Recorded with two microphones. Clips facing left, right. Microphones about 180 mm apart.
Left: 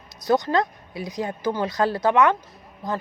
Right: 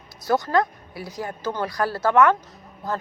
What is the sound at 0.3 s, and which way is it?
A woman's voice, 20° left (ahead or behind).